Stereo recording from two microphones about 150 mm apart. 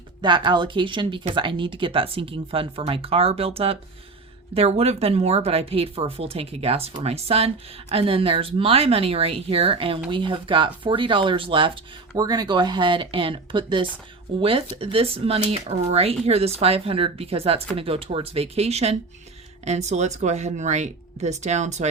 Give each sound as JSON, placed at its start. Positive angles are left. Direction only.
{"t": 0.2, "sound": "speech", "side_deg": -30}
{"t": 12.1, "sound": "speech", "side_deg": -25}